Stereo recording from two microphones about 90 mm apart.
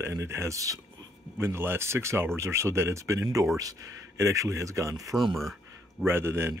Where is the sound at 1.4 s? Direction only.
25° right (ahead or behind).